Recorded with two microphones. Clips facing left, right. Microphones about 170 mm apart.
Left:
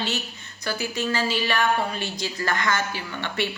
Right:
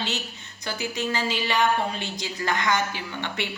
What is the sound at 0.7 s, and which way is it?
A woman's voice, 20° right (ahead or behind).